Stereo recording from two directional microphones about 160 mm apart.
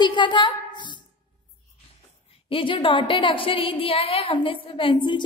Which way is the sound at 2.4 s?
35° left (ahead or behind).